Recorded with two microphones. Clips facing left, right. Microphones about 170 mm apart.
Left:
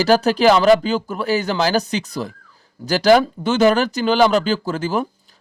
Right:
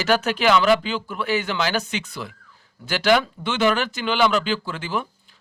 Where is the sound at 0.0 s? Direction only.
35° left (ahead or behind).